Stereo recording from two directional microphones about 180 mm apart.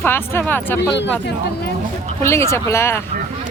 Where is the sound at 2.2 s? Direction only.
15° left (ahead or behind).